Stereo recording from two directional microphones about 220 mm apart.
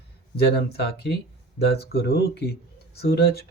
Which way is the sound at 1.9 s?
50° left (ahead or behind).